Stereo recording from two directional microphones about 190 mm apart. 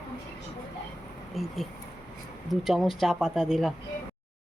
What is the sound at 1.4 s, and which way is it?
Speech, centre (ahead or behind).